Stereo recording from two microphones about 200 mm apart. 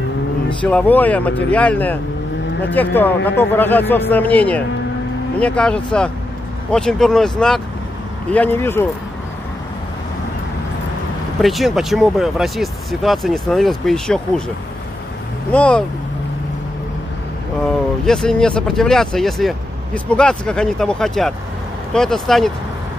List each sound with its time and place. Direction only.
0.7 s speech: 5° left (ahead or behind)
11.4 s speech: centre (ahead or behind)
15.5 s speech: 5° left (ahead or behind)
18.0 s speech: 5° left (ahead or behind)